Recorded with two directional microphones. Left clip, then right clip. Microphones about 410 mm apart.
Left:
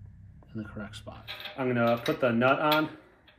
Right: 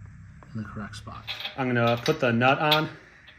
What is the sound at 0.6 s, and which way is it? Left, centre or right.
Speech, centre.